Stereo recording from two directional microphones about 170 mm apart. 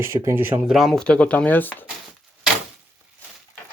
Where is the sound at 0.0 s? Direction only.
15° right (ahead or behind).